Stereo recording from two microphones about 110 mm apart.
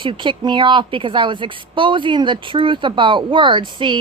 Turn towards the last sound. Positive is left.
turn(degrees=-45)  # may be behind; listen again after turning